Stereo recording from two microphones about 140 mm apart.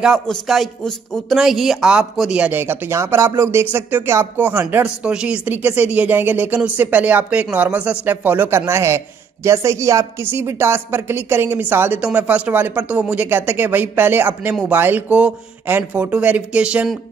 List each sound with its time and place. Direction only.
0.0 s speech: centre (ahead or behind)